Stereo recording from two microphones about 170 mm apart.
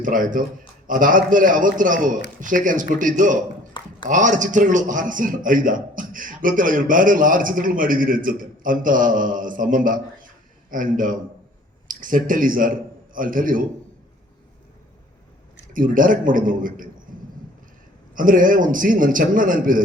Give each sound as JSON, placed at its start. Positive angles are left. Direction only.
{"t": 0.0, "sound": "a man's voice", "side_deg": -55}
{"t": 15.7, "sound": "a man's voice", "side_deg": -55}
{"t": 18.1, "sound": "a man's voice", "side_deg": -55}